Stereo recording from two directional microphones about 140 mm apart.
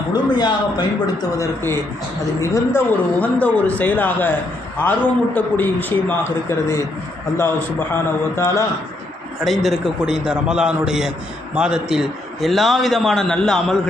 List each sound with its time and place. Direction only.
0.1 s speech: 30° left (ahead or behind)
2.4 s speech: 20° left (ahead or behind)
9.4 s a man's voice: centre (ahead or behind)